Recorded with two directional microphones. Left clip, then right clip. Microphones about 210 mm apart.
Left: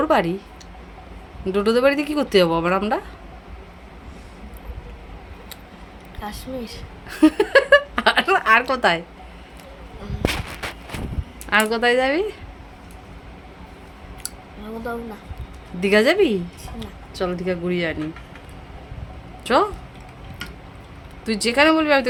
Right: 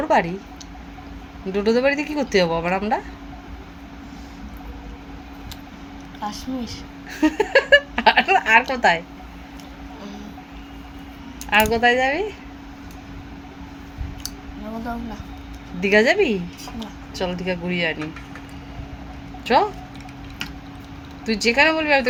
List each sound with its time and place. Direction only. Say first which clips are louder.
0.1 s speech: right 4 dB; 35° left (ahead or behind)
1.5 s speech: left 1 dB; 30° left (ahead or behind)
6.2 s a woman's voice: right 2 dB; 25° left (ahead or behind)
7.2 s speech: left 2 dB; 35° left (ahead or behind)
11.5 s speech: right 1 dB; 35° left (ahead or behind)
15.8 s a woman's voice: even; 35° left (ahead or behind)
19.5 s speech: right 1 dB; 30° left (ahead or behind)
21.2 s speech: even; 30° left (ahead or behind)